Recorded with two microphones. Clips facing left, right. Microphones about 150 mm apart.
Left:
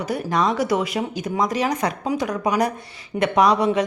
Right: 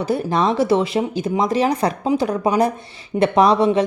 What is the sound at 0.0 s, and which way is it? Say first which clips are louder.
A woman's voice: right 3 dB; 30° right (ahead or behind).